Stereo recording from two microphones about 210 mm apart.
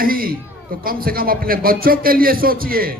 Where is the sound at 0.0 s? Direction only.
45° right (ahead or behind).